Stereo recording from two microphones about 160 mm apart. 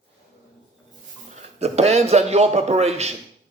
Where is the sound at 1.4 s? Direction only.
45° right (ahead or behind).